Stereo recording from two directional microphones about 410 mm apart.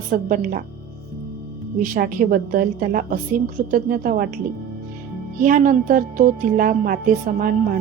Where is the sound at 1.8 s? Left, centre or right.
Centre.